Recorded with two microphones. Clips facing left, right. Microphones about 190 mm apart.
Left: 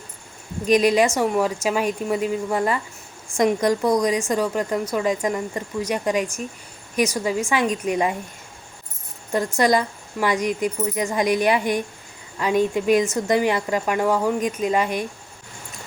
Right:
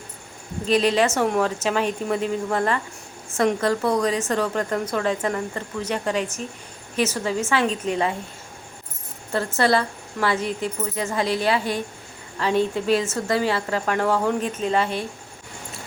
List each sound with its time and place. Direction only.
0.6 s speech: 10° left (ahead or behind)
9.3 s speech: 15° left (ahead or behind)